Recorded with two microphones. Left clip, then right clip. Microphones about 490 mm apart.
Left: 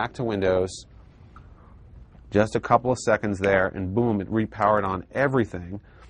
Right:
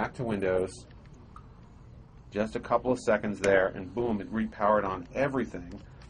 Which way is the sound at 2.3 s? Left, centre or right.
Left.